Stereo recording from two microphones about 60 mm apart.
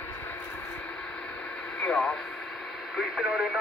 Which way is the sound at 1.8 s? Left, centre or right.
Centre.